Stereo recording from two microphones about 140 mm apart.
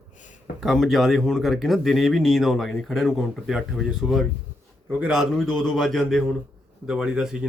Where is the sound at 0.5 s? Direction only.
Centre (ahead or behind).